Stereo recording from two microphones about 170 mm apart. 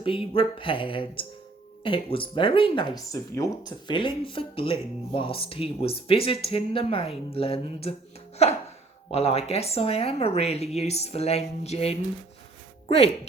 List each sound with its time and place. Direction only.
0.0 s speech: 30° left (ahead or behind)